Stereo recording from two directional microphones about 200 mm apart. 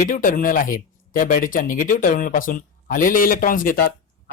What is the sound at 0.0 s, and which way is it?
Speech, 40° left (ahead or behind).